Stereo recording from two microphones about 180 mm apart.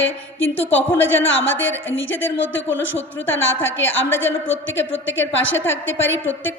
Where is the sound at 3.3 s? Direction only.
90° left.